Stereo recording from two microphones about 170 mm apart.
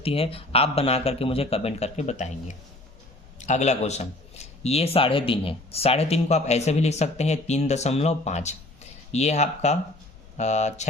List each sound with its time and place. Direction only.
0.0 s speech: 35° left (ahead or behind)